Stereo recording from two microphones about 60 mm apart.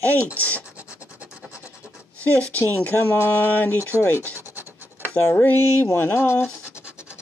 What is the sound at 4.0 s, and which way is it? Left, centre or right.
Speech, left.